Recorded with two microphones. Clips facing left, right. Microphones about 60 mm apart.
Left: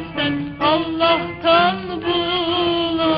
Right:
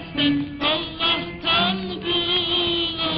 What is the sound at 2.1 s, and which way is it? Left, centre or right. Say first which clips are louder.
Music: left 5 dB; left.